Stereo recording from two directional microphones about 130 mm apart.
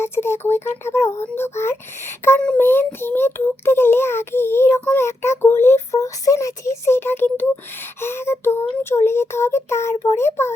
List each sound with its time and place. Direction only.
0.0 s child singing: 20° left (ahead or behind)
2.6 s a child's voice: 15° left (ahead or behind)
8.0 s child singing: 20° left (ahead or behind)